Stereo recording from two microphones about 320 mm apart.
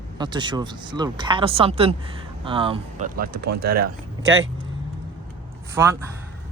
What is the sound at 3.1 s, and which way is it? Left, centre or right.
Speech, right.